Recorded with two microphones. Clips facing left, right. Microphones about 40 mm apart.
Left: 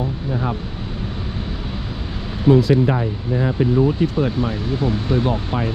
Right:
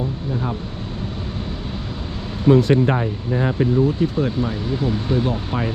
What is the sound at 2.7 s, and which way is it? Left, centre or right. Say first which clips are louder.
Speech: even; centre.